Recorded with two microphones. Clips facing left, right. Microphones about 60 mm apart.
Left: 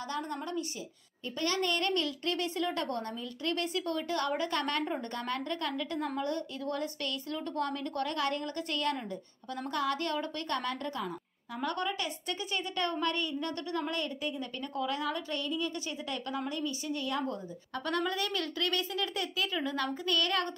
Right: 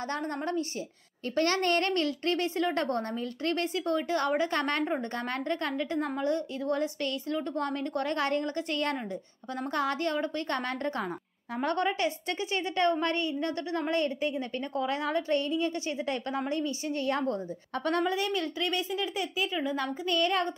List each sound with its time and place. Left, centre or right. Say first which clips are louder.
0.1 s a woman's voice: right 3 dB; right
1.3 s a woman's voice: right 5 dB; right
18.0 s speech: right 4 dB; right